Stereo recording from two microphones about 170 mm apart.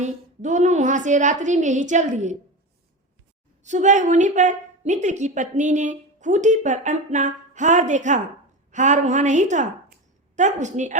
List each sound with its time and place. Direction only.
0.0 s a woman's voice: 45° right (ahead or behind)
3.6 s a woman's voice: 45° right (ahead or behind)